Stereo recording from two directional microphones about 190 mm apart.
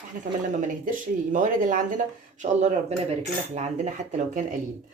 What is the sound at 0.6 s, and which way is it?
Speech, 45° right (ahead or behind).